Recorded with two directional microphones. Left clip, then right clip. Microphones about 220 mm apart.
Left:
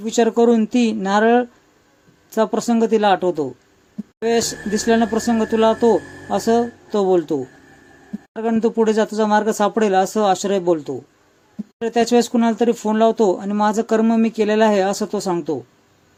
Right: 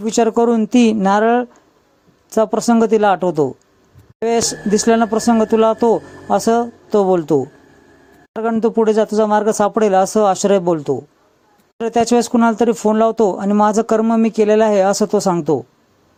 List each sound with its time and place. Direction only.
0.0 s speech: 30° right (ahead or behind)